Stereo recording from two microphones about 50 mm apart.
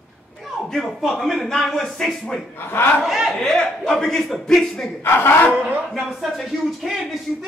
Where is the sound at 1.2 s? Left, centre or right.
Centre.